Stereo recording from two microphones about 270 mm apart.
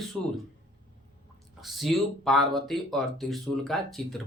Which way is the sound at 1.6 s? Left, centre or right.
Centre.